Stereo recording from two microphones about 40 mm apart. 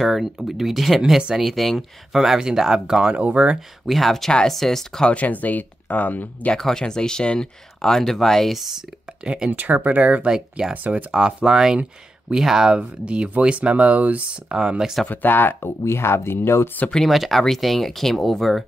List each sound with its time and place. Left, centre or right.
0.0 s speech: centre
2.1 s speech: centre
3.2 s speech: right
3.8 s speech: centre
5.1 s speech: left
6.5 s speech: centre
9.2 s speech: right
9.5 s speech: right; by 12.8 s centre
13.0 s speech: right
14.5 s speech: centre
15.0 s speech: left
17.1 s speech: centre